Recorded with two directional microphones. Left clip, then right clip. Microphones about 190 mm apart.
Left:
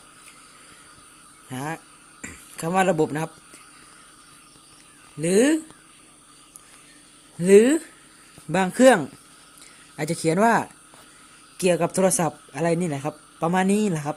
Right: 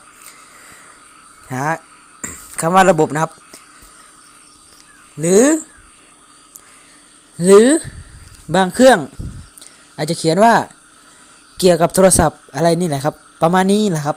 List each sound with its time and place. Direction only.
1.5 s a man's voice: 25° right (ahead or behind)
5.2 s a man's voice: 20° right (ahead or behind)
7.3 s a man's voice: 20° right (ahead or behind)